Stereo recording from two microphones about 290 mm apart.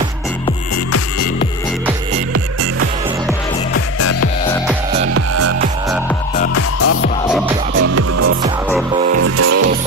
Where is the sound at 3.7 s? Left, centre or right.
Left.